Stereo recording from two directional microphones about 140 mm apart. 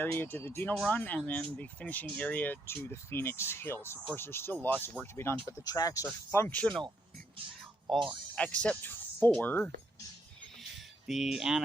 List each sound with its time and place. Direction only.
0.0 s speech: 15° left (ahead or behind)
7.9 s speech: centre (ahead or behind)
10.6 s a sound: centre (ahead or behind)